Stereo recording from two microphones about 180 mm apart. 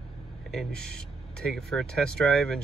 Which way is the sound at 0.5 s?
5° left (ahead or behind).